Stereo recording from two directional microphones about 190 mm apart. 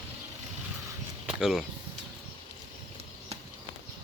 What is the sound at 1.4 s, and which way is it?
Speech, 5° right (ahead or behind).